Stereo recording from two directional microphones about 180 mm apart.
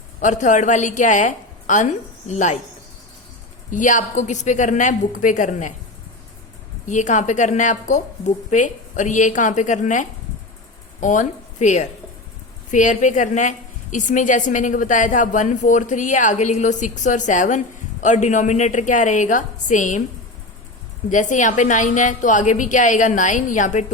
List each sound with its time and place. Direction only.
0.2 s a woman's voice: 45° left (ahead or behind)
3.7 s a woman's voice: 45° left (ahead or behind)
6.8 s a woman's voice: 45° left (ahead or behind)
21.1 s a woman's voice: 45° left (ahead or behind)